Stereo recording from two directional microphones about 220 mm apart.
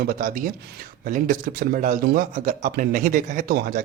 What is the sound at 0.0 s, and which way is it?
A man's voice, 40° right (ahead or behind).